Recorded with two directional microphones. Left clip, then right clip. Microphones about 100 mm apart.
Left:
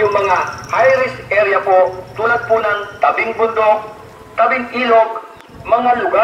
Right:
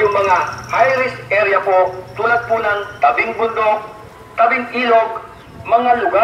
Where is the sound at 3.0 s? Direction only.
50° left (ahead or behind).